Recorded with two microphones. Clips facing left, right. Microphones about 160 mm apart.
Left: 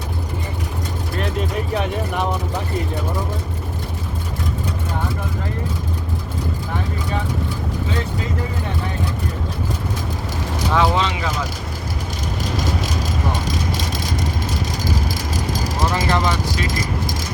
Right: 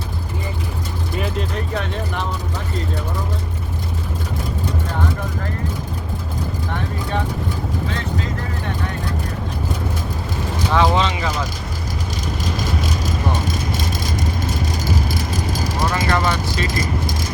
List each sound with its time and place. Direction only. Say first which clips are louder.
1.7 s speech: left 3 dB; 10° left (ahead or behind)
10.7 s speech: right 1 dB; 5° left (ahead or behind)
15.9 s speech: even; 20° left (ahead or behind)